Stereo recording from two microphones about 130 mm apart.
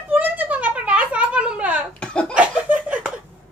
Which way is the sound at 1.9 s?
10° left (ahead or behind).